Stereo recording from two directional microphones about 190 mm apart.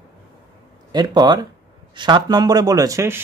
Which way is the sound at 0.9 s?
20° right (ahead or behind).